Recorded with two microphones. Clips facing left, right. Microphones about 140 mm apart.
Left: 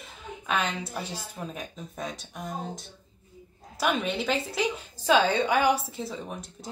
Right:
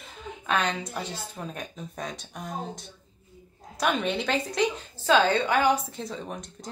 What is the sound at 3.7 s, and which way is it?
A woman's voice, centre (ahead or behind).